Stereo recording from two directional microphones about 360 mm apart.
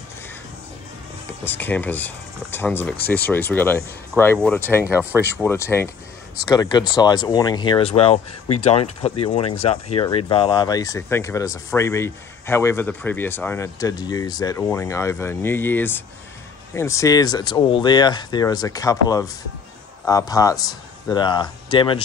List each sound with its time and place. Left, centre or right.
1.4 s speech: centre
4.8 s speech: centre
5.4 s speech: centre